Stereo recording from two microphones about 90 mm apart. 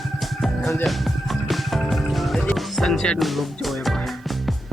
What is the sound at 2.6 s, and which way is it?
Speech, centre (ahead or behind).